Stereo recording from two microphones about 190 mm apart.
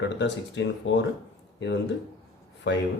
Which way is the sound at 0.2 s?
70° left (ahead or behind).